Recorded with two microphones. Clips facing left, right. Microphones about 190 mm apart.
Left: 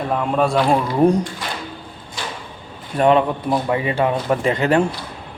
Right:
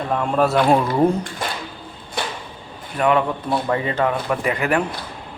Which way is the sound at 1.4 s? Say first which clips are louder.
Right 2 dB; 50° right (ahead or behind).